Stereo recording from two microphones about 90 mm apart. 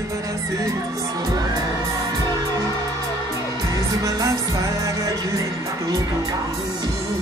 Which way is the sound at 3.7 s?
40° right (ahead or behind).